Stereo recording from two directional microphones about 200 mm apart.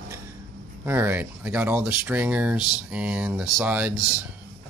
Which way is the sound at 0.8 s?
10° right (ahead or behind).